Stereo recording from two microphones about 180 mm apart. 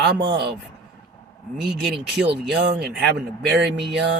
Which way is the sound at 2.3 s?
70° right (ahead or behind).